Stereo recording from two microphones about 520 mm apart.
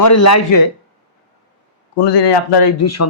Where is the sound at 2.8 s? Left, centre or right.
Left.